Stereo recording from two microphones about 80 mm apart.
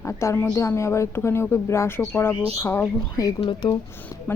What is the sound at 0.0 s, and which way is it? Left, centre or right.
A woman's voice, left.